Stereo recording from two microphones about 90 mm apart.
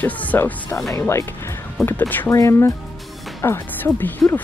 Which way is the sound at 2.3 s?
35° left (ahead or behind).